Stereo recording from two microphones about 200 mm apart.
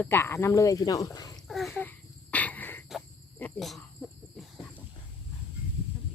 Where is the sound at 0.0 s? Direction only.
10° left (ahead or behind).